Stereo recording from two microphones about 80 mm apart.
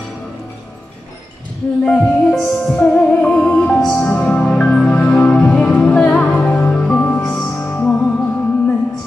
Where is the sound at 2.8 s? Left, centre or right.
Centre.